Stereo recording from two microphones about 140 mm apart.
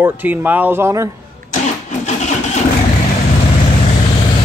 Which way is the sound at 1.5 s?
60° left (ahead or behind).